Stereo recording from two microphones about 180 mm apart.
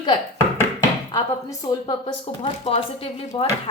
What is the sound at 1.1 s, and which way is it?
A woman's voice, 25° left (ahead or behind).